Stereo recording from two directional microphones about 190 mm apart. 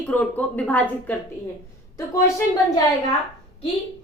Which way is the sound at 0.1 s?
10° left (ahead or behind).